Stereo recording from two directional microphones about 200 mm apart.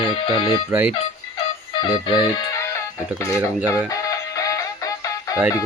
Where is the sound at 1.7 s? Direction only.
25° left (ahead or behind).